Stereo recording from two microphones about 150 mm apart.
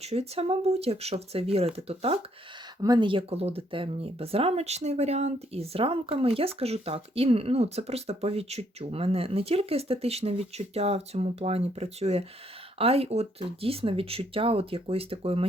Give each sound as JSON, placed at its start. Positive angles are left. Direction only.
{"t": 0.0, "sound": "speech", "side_deg": -40}
{"t": 2.8, "sound": "speech", "side_deg": -30}